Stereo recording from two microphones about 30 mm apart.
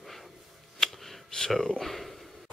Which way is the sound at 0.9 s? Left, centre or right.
Centre.